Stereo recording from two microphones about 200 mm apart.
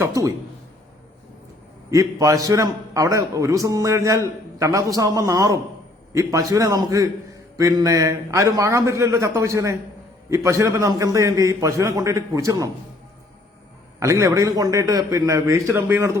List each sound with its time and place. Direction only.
0.0 s a man's voice: 15° right (ahead or behind)
1.9 s a man's voice: 15° right (ahead or behind)
14.0 s a man's voice: 15° right (ahead or behind)